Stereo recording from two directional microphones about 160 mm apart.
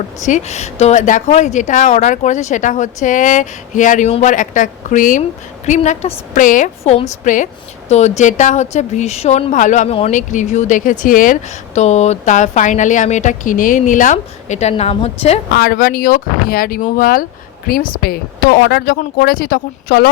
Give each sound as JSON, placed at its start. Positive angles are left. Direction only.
{"t": 0.2, "sound": "speech", "side_deg": 50}
{"t": 15.5, "sound": "speech", "side_deg": 70}